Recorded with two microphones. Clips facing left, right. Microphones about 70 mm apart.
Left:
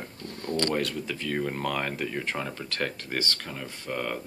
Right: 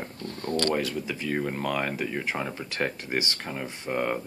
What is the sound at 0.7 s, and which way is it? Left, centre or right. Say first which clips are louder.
Speech: right 1 dB; centre.